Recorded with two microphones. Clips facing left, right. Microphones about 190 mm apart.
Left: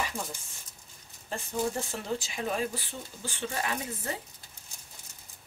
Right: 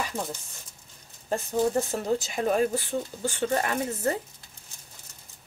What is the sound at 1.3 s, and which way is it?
Speech, 40° right (ahead or behind).